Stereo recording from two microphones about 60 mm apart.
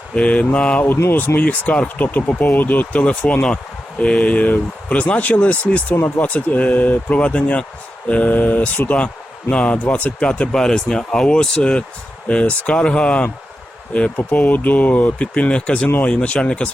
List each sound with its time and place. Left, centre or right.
0.2 s speech: left